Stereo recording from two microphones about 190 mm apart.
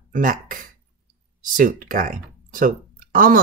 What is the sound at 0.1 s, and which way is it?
Speech, 45° right (ahead or behind).